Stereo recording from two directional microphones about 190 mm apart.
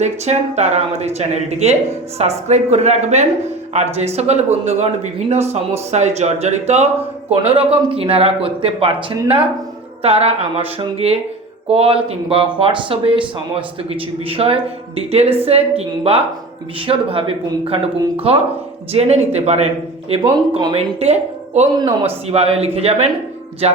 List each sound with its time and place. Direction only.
0.0 s speech: 35° right (ahead or behind)
14.3 s speech: 30° right (ahead or behind)